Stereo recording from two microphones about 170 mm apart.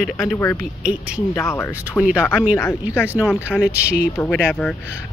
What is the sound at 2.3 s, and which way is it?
Speech, 10° right (ahead or behind).